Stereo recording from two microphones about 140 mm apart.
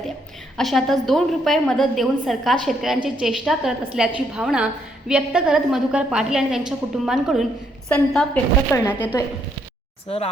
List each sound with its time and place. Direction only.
0.5 s a woman's voice: centre (ahead or behind)
8.7 s speech: 20° left (ahead or behind)
10.1 s speech: 45° left (ahead or behind)